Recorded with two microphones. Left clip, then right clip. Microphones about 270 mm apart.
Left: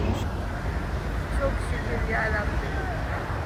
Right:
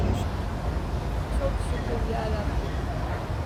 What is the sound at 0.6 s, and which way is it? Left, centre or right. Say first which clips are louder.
Vehicle: left 1 dB; centre.